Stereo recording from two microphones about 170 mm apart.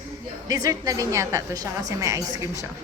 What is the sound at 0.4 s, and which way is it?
A woman's voice, 20° right (ahead or behind).